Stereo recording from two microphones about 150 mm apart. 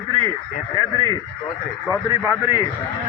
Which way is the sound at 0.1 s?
35° right (ahead or behind).